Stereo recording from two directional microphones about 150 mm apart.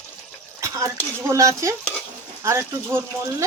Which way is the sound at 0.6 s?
20° right (ahead or behind).